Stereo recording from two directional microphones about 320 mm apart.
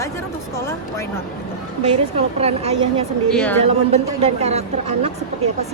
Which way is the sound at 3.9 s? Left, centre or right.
Centre.